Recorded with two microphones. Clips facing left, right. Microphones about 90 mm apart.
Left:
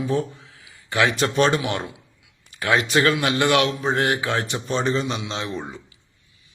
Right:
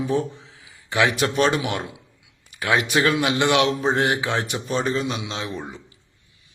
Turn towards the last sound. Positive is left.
turn(degrees=-5)  # may be behind; listen again after turning